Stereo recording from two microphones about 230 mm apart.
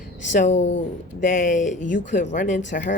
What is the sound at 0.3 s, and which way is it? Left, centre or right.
Speech, left.